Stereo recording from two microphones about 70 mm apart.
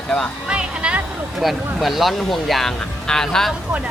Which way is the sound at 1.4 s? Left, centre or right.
Centre.